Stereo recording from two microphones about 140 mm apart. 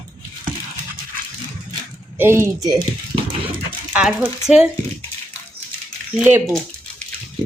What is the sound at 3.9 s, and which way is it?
Speech, 5° right (ahead or behind).